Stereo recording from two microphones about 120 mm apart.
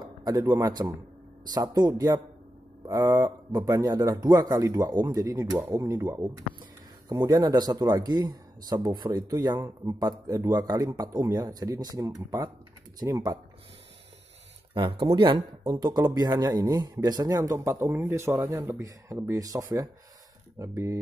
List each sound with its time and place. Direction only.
0.2 s speech: 30° right (ahead or behind)
7.1 s speech: 35° right (ahead or behind)
14.7 s speech: 45° right (ahead or behind); by 21.0 s 25° right (ahead or behind)